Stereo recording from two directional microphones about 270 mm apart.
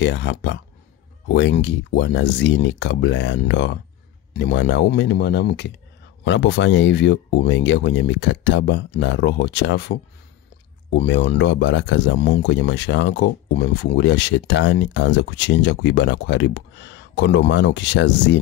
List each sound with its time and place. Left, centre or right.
0.0 s speech: left